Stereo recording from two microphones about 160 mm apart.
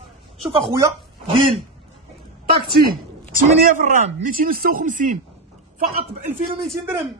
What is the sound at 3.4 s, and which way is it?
Speech, 55° right (ahead or behind).